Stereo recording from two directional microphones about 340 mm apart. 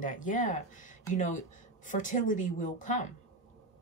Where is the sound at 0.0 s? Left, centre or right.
Left.